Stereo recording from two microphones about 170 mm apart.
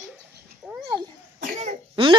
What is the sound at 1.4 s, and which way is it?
Cough, 45° right (ahead or behind).